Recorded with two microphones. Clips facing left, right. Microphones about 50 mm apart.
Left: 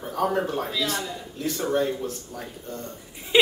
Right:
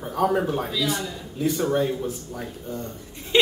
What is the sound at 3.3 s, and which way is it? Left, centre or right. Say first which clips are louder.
Speech: even; centre.